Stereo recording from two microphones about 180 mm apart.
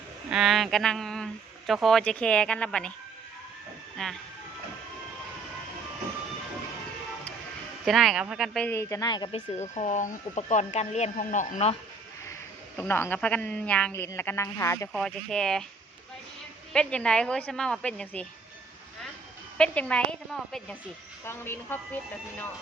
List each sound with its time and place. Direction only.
0.3 s speech: centre (ahead or behind)
4.0 s speech: 5° left (ahead or behind)
7.9 s speech: centre (ahead or behind); by 9.4 s 25° left (ahead or behind)
9.6 s speech: 40° left (ahead or behind)
12.7 s speech: 10° left (ahead or behind)
14.9 s speech: 5° left (ahead or behind)
16.7 s speech: 5° left (ahead or behind)
19.5 s speech: 5° left (ahead or behind)